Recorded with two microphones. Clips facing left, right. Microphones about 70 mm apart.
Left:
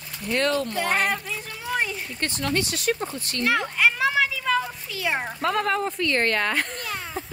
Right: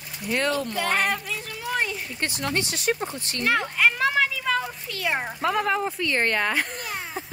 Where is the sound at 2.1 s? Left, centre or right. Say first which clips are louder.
Left 2 dB; centre.